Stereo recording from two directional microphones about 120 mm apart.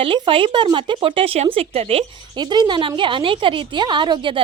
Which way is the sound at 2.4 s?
35° right (ahead or behind).